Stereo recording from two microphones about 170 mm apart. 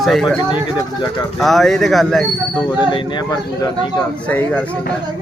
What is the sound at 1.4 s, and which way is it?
Speech, centre (ahead or behind).